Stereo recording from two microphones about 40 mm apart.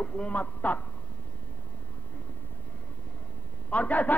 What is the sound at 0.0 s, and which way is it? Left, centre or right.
Speech, left.